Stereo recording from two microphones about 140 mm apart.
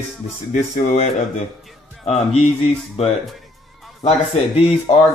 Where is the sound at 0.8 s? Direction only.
50° left (ahead or behind).